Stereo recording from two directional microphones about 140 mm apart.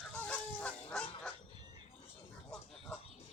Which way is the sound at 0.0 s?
5° left (ahead or behind).